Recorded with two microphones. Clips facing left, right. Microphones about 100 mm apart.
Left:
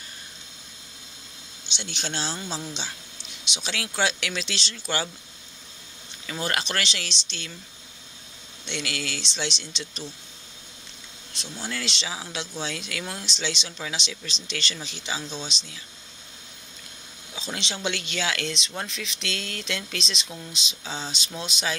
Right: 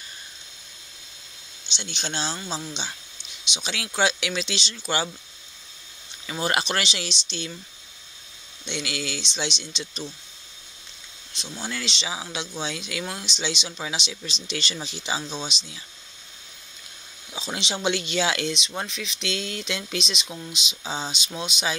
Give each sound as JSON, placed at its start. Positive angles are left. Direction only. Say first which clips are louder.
{"t": 1.8, "sound": "speech", "louder": "right 1 dB", "side_deg": 5}
{"t": 6.2, "sound": "speech", "louder": "right 3 dB", "side_deg": -15}
{"t": 8.6, "sound": "speech", "louder": "right 1 dB", "side_deg": -5}
{"t": 11.3, "sound": "speech", "louder": "right 1 dB", "side_deg": 0}
{"t": 17.3, "sound": "a sound", "louder": "right 2 dB", "side_deg": -15}
{"t": 17.7, "sound": "speech", "louder": "right 6 dB", "side_deg": -20}
{"t": 18.5, "sound": "speech", "louder": "right 2 dB", "side_deg": -10}